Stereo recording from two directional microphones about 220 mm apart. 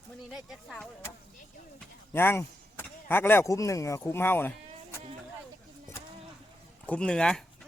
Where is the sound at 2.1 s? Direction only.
10° left (ahead or behind).